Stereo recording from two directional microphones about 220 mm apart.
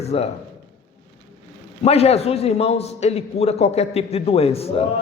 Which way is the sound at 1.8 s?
30° left (ahead or behind).